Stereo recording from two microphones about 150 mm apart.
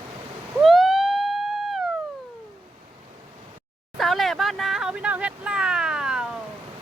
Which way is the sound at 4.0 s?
Centre (ahead or behind).